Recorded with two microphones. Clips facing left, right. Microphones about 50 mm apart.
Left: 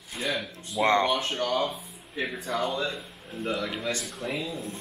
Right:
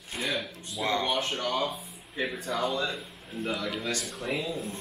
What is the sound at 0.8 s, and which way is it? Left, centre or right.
Speech, left.